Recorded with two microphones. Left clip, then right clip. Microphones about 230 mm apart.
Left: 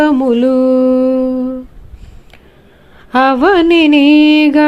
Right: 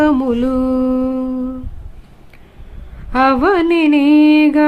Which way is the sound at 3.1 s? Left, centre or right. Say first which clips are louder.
Left 3 dB; centre.